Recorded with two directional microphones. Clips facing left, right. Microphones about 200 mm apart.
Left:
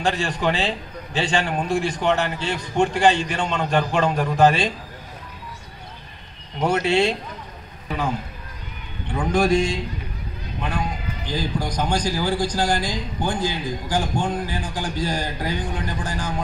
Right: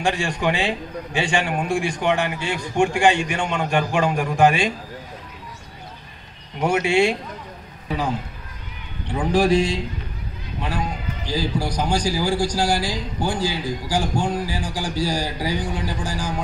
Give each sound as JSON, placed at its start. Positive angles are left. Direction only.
{"t": 0.0, "sound": "a man's voice", "side_deg": -10}
{"t": 6.6, "sound": "a man's voice", "side_deg": -10}
{"t": 9.5, "sound": "a man's voice", "side_deg": -35}
{"t": 11.2, "sound": "a man's voice", "side_deg": -10}